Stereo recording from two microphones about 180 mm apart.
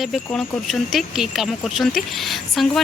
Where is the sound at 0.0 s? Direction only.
Centre (ahead or behind).